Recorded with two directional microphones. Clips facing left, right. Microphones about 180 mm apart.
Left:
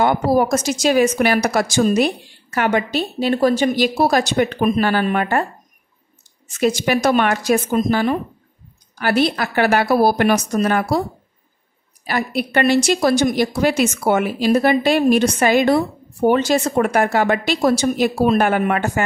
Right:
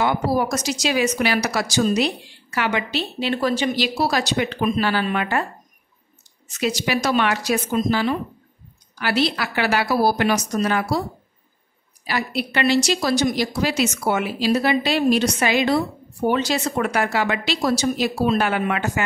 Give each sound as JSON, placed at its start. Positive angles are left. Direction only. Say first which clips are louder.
{"t": 0.0, "sound": "a woman's voice", "louder": "left 5 dB", "side_deg": 50}
{"t": 6.6, "sound": "a woman's voice", "louder": "left 5 dB", "side_deg": 50}
{"t": 12.0, "sound": "a woman's voice", "louder": "left 3 dB", "side_deg": 50}